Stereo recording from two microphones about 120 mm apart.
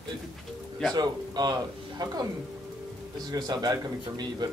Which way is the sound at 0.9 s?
35° right (ahead or behind).